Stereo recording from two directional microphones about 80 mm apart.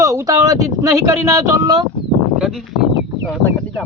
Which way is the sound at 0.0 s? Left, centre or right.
Right.